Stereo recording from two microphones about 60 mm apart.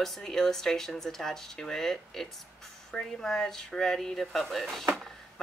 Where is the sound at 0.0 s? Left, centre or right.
Centre.